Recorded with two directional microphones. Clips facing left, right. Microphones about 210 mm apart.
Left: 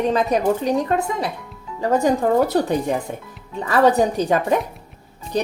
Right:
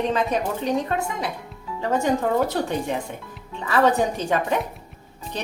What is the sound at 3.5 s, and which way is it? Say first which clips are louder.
Speech: left 4 dB; 40° left (ahead or behind).